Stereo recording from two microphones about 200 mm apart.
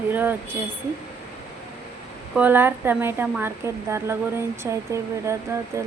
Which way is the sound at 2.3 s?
10° right (ahead or behind).